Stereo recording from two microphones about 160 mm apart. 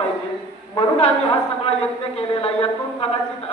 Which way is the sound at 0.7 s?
40° left (ahead or behind).